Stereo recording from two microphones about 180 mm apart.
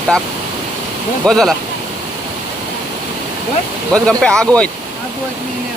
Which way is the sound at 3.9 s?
5° left (ahead or behind).